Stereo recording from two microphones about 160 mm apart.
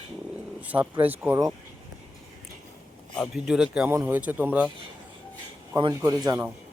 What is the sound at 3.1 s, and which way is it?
A man's voice, centre (ahead or behind).